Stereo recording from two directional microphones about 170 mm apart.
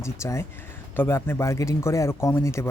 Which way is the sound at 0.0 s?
15° left (ahead or behind).